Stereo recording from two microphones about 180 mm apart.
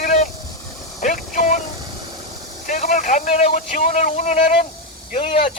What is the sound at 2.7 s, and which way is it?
Speech, 45° left (ahead or behind).